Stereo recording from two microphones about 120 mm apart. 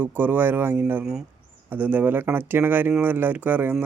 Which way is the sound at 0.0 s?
15° right (ahead or behind).